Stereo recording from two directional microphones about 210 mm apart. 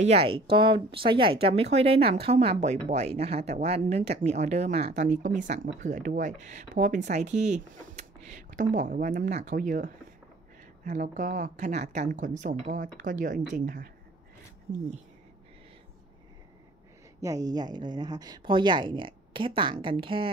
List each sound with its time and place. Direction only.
0.0 s speech: 30° right (ahead or behind)
17.2 s speech: 15° right (ahead or behind)